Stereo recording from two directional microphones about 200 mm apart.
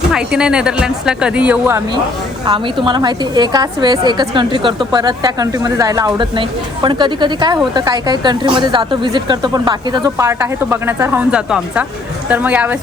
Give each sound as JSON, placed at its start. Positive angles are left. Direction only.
{"t": 0.1, "sound": "speech", "side_deg": -5}
{"t": 2.8, "sound": "speech", "side_deg": -20}